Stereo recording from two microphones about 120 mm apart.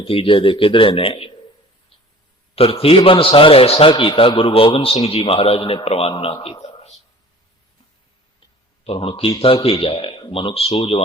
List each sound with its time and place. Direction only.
0.0 s a man's voice: 45° left (ahead or behind)
2.6 s a man's voice: 55° left (ahead or behind)
8.8 s a man's voice: 55° left (ahead or behind)